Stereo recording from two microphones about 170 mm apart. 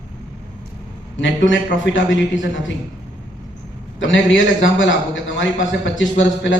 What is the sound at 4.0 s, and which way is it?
A man's voice, 90° left.